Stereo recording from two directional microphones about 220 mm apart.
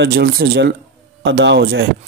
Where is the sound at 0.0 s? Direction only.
45° right (ahead or behind).